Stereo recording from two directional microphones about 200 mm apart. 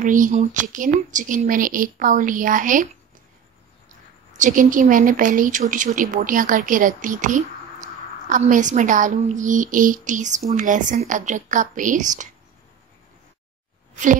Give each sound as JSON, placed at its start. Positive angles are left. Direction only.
{"t": 0.0, "sound": "speech", "side_deg": -40}
{"t": 4.4, "sound": "speech", "side_deg": -40}